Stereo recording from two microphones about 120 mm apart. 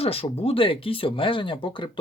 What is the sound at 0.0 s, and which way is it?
Speech, 55° left (ahead or behind).